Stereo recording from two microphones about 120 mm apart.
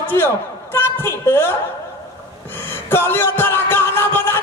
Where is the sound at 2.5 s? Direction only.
20° left (ahead or behind).